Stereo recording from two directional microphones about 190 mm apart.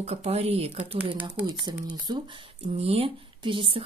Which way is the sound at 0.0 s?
35° right (ahead or behind).